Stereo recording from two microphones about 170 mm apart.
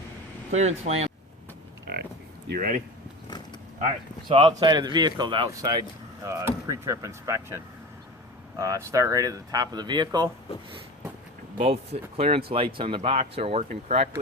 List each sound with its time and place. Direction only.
0.5 s speech: 40° right (ahead or behind)
2.5 s speech: 55° right (ahead or behind)
4.3 s speech: 30° right (ahead or behind)
6.2 s speech: 15° right (ahead or behind)
11.5 s speech: 35° right (ahead or behind)